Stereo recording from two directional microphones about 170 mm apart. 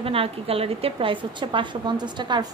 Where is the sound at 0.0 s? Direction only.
35° right (ahead or behind).